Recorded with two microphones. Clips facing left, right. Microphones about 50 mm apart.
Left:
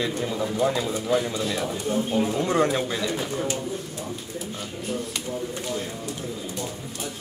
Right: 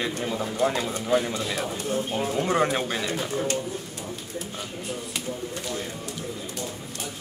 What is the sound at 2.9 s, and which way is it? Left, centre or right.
Speech, right.